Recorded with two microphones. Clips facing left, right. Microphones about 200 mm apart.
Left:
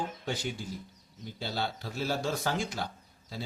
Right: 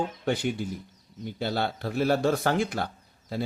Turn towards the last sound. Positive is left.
turn(degrees=-60)  # may be behind; listen again after turning